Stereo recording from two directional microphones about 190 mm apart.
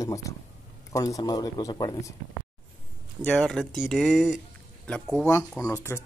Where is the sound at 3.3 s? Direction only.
Centre (ahead or behind).